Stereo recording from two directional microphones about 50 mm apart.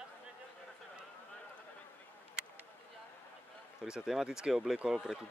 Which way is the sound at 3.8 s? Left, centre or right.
Centre.